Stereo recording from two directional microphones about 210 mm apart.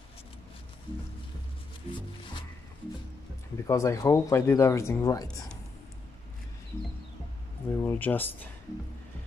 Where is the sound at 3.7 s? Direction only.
15° left (ahead or behind).